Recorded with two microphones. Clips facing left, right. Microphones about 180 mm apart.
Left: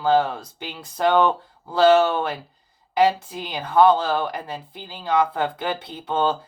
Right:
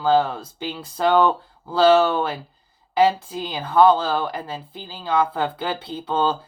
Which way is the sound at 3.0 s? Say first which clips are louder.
Right 1 dB; 20° left (ahead or behind).